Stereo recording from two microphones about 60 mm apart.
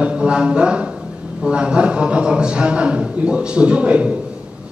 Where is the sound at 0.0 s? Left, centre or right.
Centre.